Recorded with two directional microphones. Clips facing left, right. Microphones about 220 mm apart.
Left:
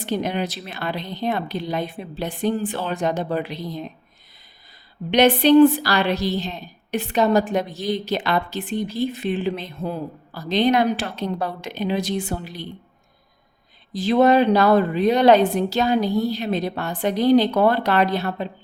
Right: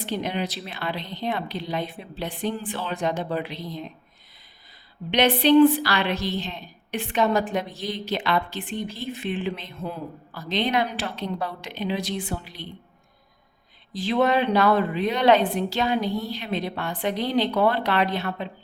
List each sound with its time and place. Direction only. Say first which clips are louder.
0.0 s speech: left 4 dB; 45° left (ahead or behind)
5.1 s a woman's voice: left 4 dB; 45° left (ahead or behind)
13.9 s a woman's voice: left 6 dB; 40° left (ahead or behind)